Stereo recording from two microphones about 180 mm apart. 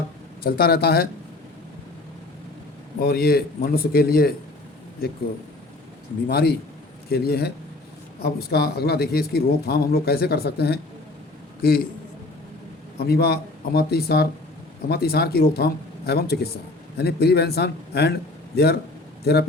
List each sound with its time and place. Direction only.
0.4 s a man's voice: 55° left (ahead or behind)
3.0 s a man's voice: 60° left (ahead or behind)
6.2 s a man's voice: 60° left (ahead or behind)
13.1 s a man's voice: 60° left (ahead or behind)